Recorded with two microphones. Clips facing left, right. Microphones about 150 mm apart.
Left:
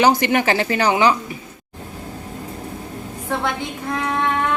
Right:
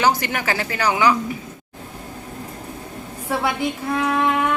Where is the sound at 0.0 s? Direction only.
20° left (ahead or behind).